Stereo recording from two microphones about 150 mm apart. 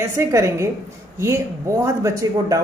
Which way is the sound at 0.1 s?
20° right (ahead or behind).